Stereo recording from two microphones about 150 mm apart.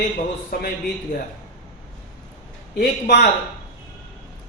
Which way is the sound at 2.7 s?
90° left.